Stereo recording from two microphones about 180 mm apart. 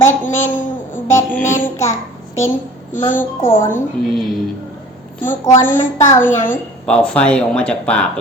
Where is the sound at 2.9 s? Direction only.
45° left (ahead or behind).